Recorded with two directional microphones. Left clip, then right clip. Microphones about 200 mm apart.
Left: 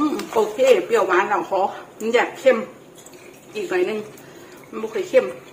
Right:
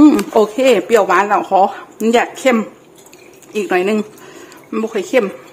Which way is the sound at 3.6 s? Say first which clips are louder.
Right 6 dB; 60° right (ahead or behind).